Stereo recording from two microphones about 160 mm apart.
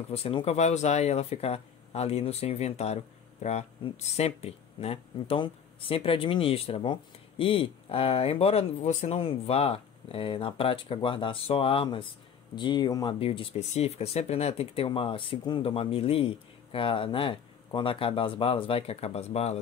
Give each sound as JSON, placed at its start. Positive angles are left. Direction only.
{"t": 0.1, "sound": "speech", "side_deg": 35}